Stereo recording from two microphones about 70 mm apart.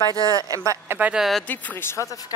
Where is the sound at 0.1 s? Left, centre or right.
Right.